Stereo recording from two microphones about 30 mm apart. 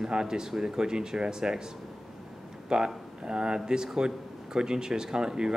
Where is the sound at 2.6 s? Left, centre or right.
Right.